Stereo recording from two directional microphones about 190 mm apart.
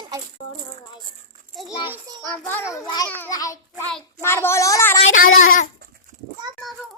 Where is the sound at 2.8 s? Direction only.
20° left (ahead or behind).